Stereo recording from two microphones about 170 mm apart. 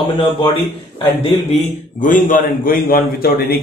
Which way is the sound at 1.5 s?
50° left (ahead or behind).